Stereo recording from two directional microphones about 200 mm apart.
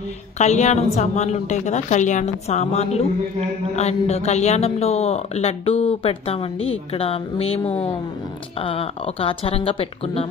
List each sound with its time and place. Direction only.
0.4 s speech: 35° left (ahead or behind)